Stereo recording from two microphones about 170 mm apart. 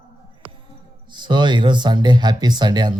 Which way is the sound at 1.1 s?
25° right (ahead or behind).